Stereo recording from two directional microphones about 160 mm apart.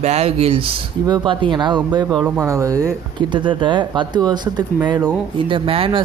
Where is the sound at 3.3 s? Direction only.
30° right (ahead or behind).